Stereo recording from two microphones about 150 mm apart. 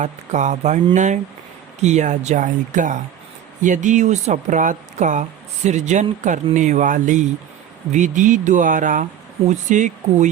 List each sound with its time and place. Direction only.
0.0 s speech: 55° right (ahead or behind)